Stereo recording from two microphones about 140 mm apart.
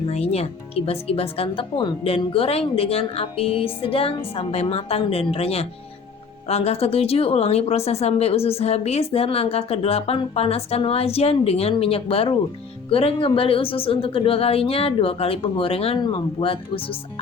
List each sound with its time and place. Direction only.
0.1 s a woman's voice: 50° left (ahead or behind)